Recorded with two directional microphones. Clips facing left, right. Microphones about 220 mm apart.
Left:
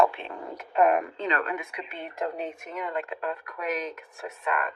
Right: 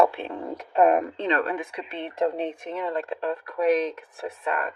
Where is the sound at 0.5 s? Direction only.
35° right (ahead or behind).